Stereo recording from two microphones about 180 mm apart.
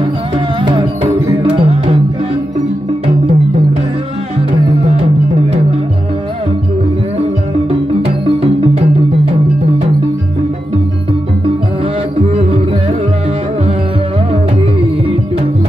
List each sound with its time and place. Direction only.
0.6 s music: 25° right (ahead or behind)
4.8 s music: 35° right (ahead or behind)
8.0 s music: 35° right (ahead or behind)